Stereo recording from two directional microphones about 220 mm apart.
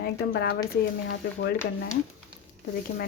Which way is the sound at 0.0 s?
50° left (ahead or behind).